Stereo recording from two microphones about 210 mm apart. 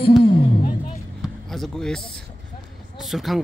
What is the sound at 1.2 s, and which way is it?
Basketball bounce, centre (ahead or behind).